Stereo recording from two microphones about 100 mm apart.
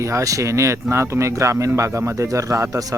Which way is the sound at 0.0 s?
30° right (ahead or behind).